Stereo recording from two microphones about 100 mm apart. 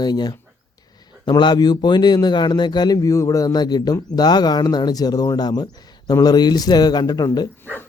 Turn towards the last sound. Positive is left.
turn(degrees=40)  # may be behind; listen again after turning